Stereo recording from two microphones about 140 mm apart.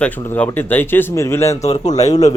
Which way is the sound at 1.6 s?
55° left (ahead or behind).